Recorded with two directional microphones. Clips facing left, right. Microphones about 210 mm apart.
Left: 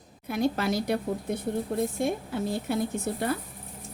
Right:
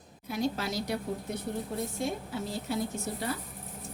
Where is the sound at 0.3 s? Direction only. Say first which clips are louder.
Left 5 dB; 55° left (ahead or behind).